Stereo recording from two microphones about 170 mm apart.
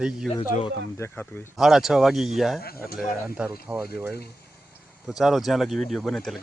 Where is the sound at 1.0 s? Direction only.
10° left (ahead or behind).